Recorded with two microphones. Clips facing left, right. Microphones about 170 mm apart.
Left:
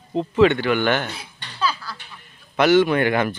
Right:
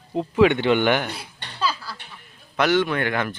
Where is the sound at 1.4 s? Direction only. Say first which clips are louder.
Right 1 dB; 60° right (ahead or behind).